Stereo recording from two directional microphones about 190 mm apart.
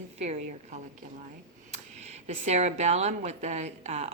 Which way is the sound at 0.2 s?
35° right (ahead or behind).